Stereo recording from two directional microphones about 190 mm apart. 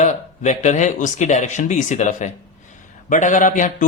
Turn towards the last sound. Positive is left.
turn(degrees=45)  # may be behind; listen again after turning